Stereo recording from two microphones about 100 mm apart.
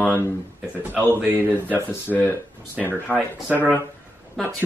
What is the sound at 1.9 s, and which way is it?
Speech, 20° left (ahead or behind).